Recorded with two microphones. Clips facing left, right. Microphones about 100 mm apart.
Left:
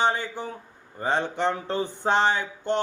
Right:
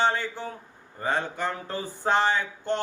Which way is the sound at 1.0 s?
20° left (ahead or behind).